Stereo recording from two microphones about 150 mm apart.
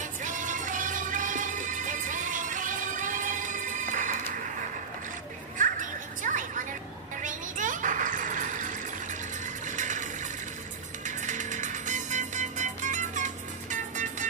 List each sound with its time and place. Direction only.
0.0 s music: 60° right (ahead or behind)
5.6 s children playing: 60° right (ahead or behind)
7.2 s neigh: 60° right (ahead or behind)
9.7 s music: 55° right (ahead or behind)
11.1 s music: 55° right (ahead or behind)